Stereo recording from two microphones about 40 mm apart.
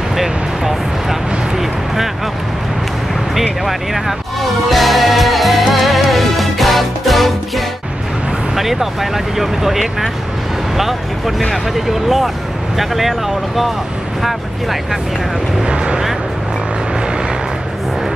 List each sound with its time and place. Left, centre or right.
0.1 s a sound: centre
3.3 s music: centre
8.5 s speech: centre
14.2 s speech: centre
15.6 s speech: right